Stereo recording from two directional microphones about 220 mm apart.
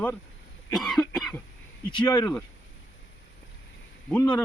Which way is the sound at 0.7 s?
Centre (ahead or behind).